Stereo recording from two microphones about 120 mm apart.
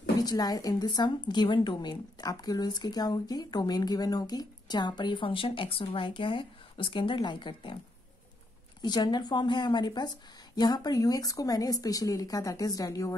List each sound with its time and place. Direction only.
0.2 s speech: 30° left (ahead or behind)
8.8 s speech: 35° left (ahead or behind)